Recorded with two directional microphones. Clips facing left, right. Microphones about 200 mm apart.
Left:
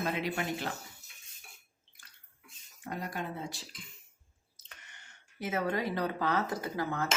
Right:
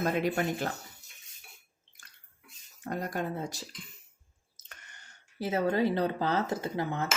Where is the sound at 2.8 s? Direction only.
45° right (ahead or behind).